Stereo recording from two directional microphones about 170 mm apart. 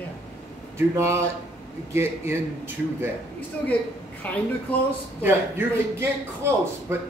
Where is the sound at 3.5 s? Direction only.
10° left (ahead or behind).